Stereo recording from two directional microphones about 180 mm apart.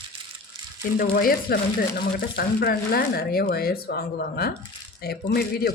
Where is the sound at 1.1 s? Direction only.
55° left (ahead or behind).